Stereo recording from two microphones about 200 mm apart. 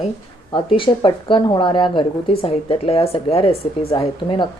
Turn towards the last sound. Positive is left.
turn(degrees=25)  # may be behind; listen again after turning